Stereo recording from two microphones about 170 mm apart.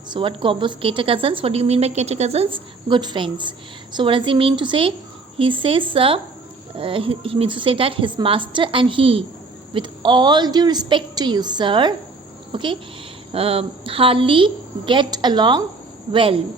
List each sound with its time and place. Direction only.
0.1 s a woman's voice: 30° right (ahead or behind)